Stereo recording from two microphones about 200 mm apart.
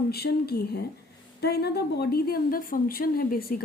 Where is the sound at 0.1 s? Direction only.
50° left (ahead or behind).